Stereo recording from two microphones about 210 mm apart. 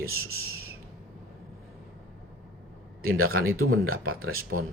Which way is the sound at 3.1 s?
80° right.